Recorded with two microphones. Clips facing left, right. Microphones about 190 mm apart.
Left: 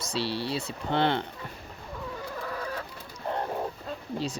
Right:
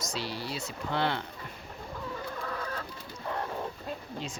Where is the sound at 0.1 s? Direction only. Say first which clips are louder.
Left 8 dB; 30° left (ahead or behind).